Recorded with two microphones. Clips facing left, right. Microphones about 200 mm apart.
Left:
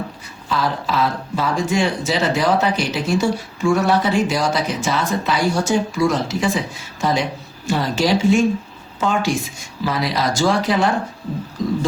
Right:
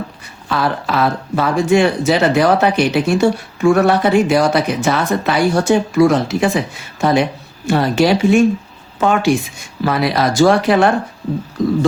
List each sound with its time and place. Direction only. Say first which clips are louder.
0.4 s a woman's voice: right 3 dB; 60° right (ahead or behind)